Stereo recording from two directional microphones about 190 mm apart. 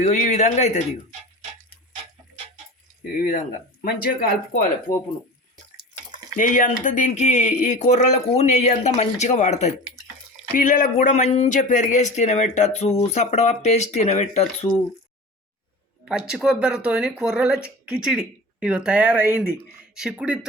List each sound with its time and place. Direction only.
0.0 s speech: 40° left (ahead or behind)
3.0 s speech: 50° left (ahead or behind)
6.3 s speech: 45° left (ahead or behind)
16.0 s speech: 5° right (ahead or behind)